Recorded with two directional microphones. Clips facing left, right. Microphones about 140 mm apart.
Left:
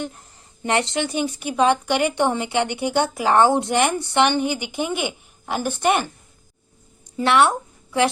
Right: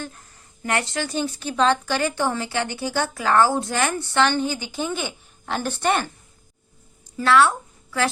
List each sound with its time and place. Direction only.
0.0 s a woman's voice: 20° left (ahead or behind)
7.2 s speech: 20° left (ahead or behind)